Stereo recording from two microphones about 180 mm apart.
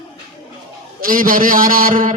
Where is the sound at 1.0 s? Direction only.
50° right (ahead or behind).